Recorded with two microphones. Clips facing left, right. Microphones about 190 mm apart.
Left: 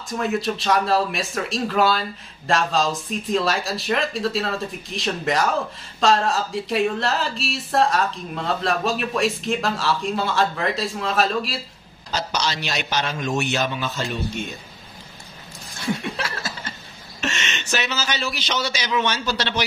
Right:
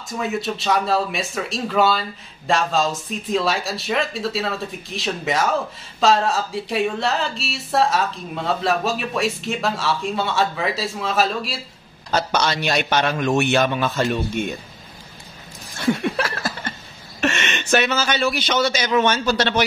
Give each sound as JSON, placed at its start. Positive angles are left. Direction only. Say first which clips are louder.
{"t": 0.1, "sound": "speech", "louder": "left 1 dB", "side_deg": 0}
{"t": 12.1, "sound": "a man's voice", "louder": "right 5 dB", "side_deg": -55}
{"t": 15.8, "sound": "chuckle", "louder": "right 6 dB", "side_deg": -60}
{"t": 17.2, "sound": "a man's voice", "louder": "right 6 dB", "side_deg": -60}